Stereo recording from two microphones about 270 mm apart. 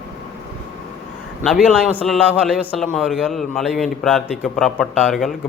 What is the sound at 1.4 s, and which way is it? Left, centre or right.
A man's voice, centre.